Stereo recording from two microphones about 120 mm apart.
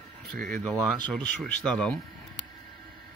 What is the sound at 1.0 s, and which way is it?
Speech, 5° left (ahead or behind).